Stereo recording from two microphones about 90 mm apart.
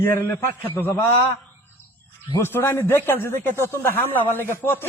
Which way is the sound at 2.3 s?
30° left (ahead or behind).